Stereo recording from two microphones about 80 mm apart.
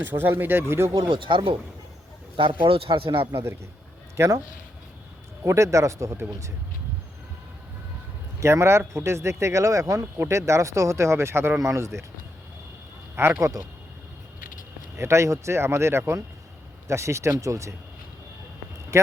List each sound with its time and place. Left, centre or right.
0.0 s speech: right
0.9 s speech: right
3.3 s speech: right
5.4 s speech: right
8.4 s speech: right
13.4 s speech: right
14.9 s speech: right